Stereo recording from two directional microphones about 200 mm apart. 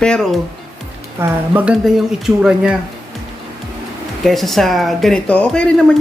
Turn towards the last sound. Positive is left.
turn(degrees=5)  # may be behind; listen again after turning